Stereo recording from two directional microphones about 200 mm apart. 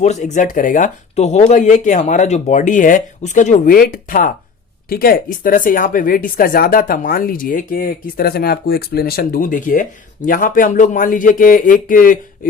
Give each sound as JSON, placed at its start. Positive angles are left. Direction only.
{"t": 0.0, "sound": "speech", "side_deg": 35}